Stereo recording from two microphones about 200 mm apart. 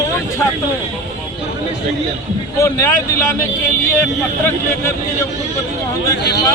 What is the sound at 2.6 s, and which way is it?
Speech, 15° left (ahead or behind).